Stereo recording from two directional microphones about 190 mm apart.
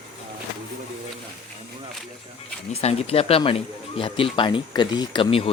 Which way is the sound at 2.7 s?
35° left (ahead or behind).